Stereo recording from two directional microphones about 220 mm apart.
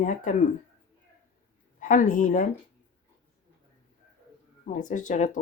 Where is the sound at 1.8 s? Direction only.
35° left (ahead or behind).